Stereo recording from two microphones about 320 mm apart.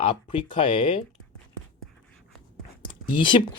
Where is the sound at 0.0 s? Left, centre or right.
Centre.